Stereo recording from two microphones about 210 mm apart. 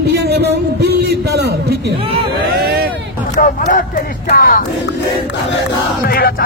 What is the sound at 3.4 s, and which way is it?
Battle cry, 40° left (ahead or behind).